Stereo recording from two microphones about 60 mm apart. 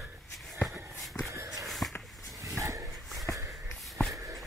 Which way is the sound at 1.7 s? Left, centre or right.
Centre.